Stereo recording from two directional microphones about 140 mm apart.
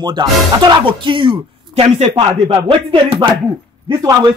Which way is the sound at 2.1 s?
35° right (ahead or behind).